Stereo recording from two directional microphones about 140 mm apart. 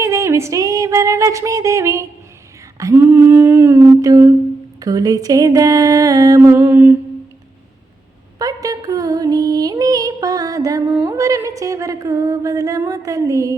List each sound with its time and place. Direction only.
0.0 s a sound: 20° right (ahead or behind)
2.7 s humming: 20° right (ahead or behind)
4.8 s music: 25° right (ahead or behind)
8.4 s music: 25° right (ahead or behind)